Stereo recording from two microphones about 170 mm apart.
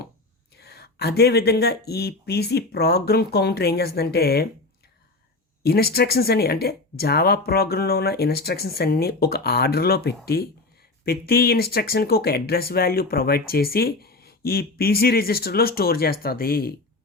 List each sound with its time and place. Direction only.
0.5 s speech: 70° left (ahead or behind)
5.6 s speech: 65° left (ahead or behind)